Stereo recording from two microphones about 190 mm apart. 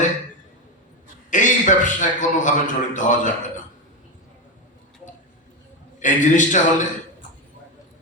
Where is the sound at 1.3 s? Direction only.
40° left (ahead or behind).